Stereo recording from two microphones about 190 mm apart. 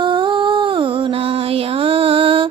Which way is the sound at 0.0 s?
25° right (ahead or behind).